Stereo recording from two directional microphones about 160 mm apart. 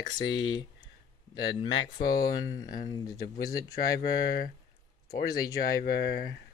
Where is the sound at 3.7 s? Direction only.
70° left (ahead or behind).